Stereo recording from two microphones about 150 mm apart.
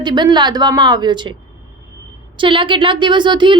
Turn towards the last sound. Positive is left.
turn(degrees=-30)  # may be behind; listen again after turning